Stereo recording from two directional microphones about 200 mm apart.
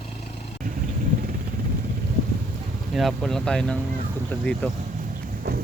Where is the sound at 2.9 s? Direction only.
Centre (ahead or behind).